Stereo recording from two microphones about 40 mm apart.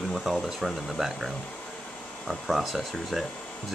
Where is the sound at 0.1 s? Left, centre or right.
Centre.